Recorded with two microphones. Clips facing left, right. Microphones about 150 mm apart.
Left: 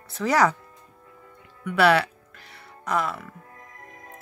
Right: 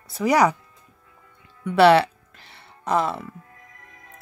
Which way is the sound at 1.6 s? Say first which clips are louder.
Right 5 dB; 30° right (ahead or behind).